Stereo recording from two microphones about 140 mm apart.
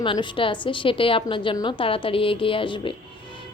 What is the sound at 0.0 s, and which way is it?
A woman's voice, 35° left (ahead or behind).